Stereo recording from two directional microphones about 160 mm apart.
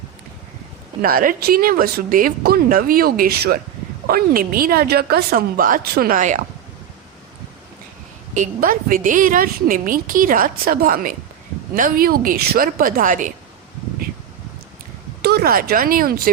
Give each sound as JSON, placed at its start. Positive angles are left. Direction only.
{"t": 1.0, "sound": "a woman's voice", "side_deg": -65}
{"t": 4.0, "sound": "a woman's voice", "side_deg": -65}
{"t": 8.4, "sound": "a woman's voice", "side_deg": -60}
{"t": 15.2, "sound": "speech", "side_deg": -80}